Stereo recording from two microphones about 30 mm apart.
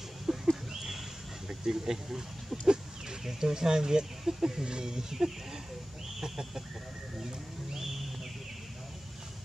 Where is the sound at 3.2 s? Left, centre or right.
Centre.